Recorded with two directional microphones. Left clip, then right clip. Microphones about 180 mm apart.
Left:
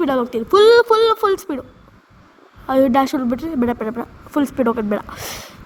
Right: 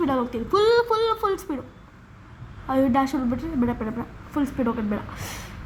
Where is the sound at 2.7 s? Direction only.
40° left (ahead or behind).